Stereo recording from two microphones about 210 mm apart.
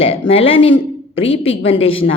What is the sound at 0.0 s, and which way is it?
A woman's voice, 25° left (ahead or behind).